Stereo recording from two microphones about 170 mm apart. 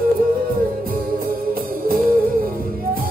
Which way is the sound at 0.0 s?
55° right (ahead or behind).